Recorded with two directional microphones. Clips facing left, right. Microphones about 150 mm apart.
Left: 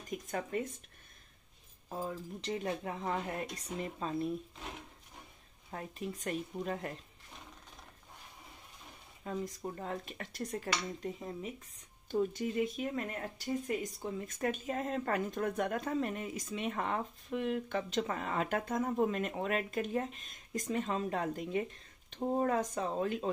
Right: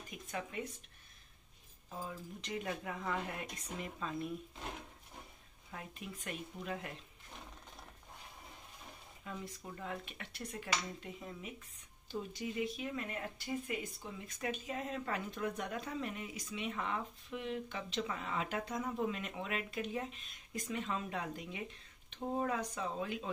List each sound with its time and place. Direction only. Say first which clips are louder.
0.1 s speech: left 7 dB; 45° left (ahead or behind)
1.9 s speech: left 6 dB; 40° left (ahead or behind)
5.7 s speech: left 7 dB; 40° left (ahead or behind)
9.2 s speech: left 8 dB; 40° left (ahead or behind)
12.1 s speech: left 8 dB; 50° left (ahead or behind)